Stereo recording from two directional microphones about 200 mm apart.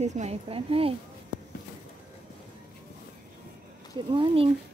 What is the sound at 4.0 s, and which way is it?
Speech, 25° right (ahead or behind).